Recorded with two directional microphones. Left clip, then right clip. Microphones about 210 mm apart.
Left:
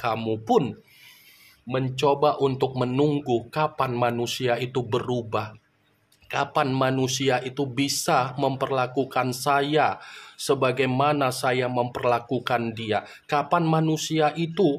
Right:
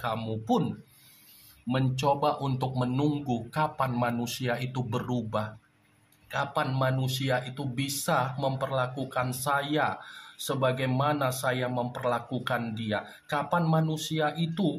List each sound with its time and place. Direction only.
0.0 s speech: 45° left (ahead or behind)
1.7 s speech: 40° left (ahead or behind)